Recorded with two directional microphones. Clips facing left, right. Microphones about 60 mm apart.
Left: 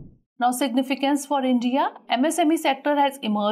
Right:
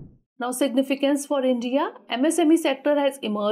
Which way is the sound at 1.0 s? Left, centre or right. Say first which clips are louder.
Even; centre.